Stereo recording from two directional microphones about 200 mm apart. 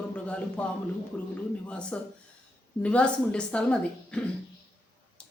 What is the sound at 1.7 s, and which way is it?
Speech, 5° left (ahead or behind).